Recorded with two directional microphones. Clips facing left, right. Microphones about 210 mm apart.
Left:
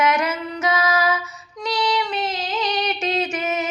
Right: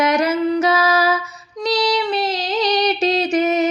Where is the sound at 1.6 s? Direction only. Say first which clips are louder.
Right 4 dB; 35° right (ahead or behind).